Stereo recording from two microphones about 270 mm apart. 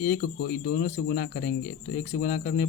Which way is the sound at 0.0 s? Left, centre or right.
Left.